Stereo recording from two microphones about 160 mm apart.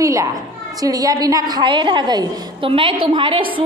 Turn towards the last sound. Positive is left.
turn(degrees=-30)  # may be behind; listen again after turning